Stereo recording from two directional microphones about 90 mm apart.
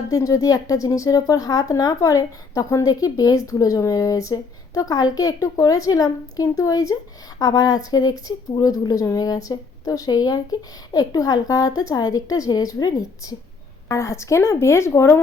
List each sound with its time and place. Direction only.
0.1 s speech: 40° left (ahead or behind)
13.8 s a woman's voice: 30° left (ahead or behind)